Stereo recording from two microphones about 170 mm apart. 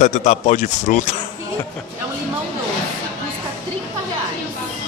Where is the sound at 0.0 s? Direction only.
45° left (ahead or behind).